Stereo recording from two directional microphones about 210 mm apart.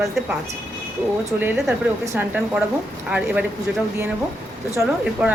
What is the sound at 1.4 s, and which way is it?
Speech, 10° right (ahead or behind).